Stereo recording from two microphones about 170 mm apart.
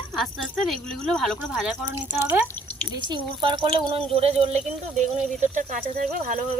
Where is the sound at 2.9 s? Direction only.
25° right (ahead or behind).